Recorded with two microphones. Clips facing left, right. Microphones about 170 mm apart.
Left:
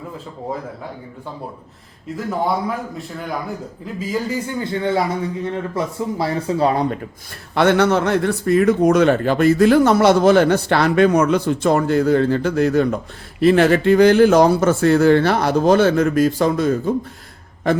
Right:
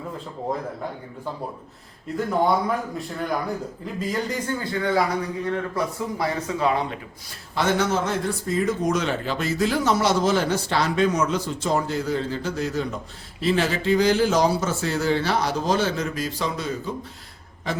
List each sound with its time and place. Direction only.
2.1 s a man's voice: centre (ahead or behind)
4.0 s a man's voice: 5° left (ahead or behind)
4.6 s a man's voice: 25° left (ahead or behind)
7.5 s a man's voice: 65° left (ahead or behind)